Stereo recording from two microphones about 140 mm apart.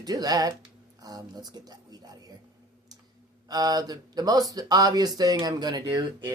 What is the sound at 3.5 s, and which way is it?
Speech, 30° right (ahead or behind).